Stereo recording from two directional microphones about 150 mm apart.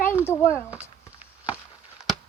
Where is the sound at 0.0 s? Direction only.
15° left (ahead or behind).